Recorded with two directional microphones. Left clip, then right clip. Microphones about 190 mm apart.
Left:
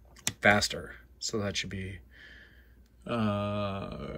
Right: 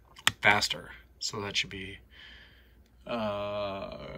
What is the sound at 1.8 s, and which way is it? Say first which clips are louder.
Speech: right 2 dB; 35° left (ahead or behind).